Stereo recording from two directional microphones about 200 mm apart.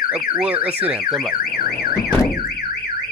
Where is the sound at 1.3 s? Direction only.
50° left (ahead or behind).